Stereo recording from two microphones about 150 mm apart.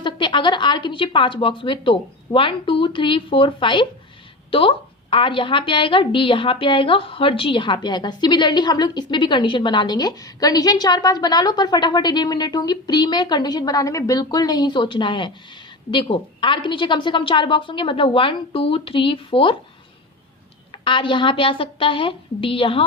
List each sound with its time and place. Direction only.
0.0 s a woman's voice: 30° left (ahead or behind)
20.8 s a woman's voice: 35° left (ahead or behind)